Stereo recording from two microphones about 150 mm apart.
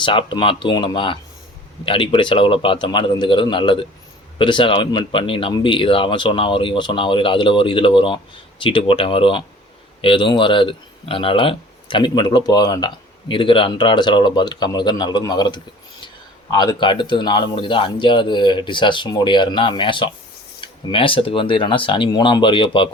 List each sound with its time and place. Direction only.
0.0 s speech: 35° left (ahead or behind)